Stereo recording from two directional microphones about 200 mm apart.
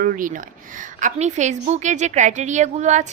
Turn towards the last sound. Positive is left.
turn(degrees=-35)  # may be behind; listen again after turning